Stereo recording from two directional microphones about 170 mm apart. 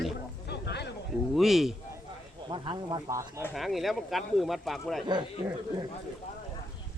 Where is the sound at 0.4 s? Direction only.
80° left.